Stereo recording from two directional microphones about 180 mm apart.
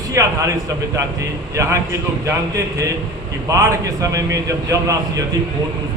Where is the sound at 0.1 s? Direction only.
15° right (ahead or behind).